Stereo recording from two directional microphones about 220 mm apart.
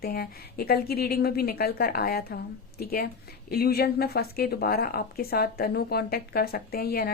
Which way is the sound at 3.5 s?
45° left (ahead or behind).